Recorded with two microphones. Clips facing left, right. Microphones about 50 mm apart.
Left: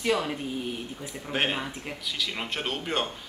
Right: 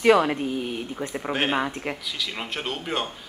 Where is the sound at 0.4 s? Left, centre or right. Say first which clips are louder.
Right 5 dB; right.